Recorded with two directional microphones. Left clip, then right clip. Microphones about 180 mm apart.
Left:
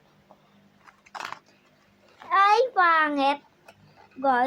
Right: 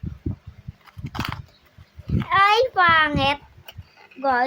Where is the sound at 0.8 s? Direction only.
30° right (ahead or behind).